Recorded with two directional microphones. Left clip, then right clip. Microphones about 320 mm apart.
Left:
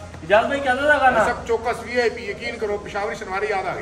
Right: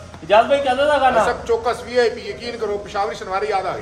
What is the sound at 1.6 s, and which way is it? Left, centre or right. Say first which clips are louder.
A man's voice: right 3 dB; centre.